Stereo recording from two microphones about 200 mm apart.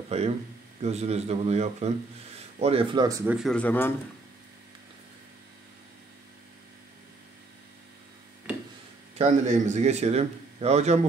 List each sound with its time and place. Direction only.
0.1 s speech: 30° right (ahead or behind); by 3.3 s 15° right (ahead or behind)
3.3 s speech: 5° left (ahead or behind)
9.2 s speech: 35° right (ahead or behind)